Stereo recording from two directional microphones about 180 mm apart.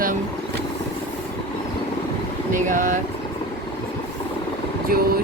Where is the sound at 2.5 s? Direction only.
45° right (ahead or behind).